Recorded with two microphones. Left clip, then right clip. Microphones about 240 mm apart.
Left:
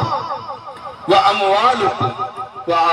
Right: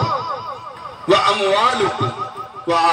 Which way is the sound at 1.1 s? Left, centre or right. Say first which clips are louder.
Left 2 dB; right.